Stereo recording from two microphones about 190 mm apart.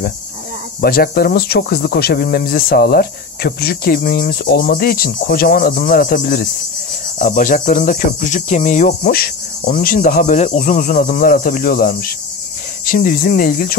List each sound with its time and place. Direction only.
0.7 s speech: 55° left (ahead or behind)